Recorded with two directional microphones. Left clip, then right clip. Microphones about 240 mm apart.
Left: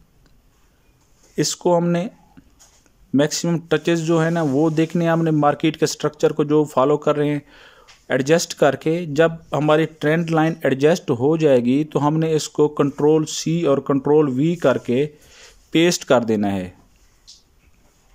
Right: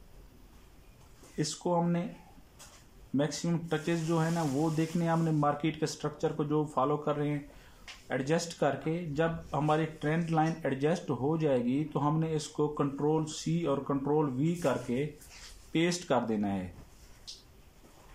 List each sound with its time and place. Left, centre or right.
1.3 s speech: left
3.2 s speech: left